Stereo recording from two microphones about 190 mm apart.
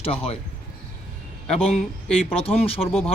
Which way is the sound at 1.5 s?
30° left (ahead or behind).